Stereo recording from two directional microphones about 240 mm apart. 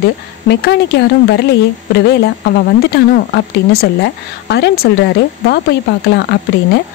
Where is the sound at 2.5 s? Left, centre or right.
Left.